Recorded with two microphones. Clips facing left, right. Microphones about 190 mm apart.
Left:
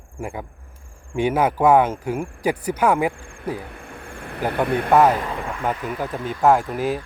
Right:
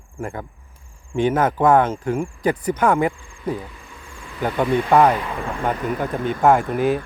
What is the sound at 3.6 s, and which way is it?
Cricket, 60° left (ahead or behind).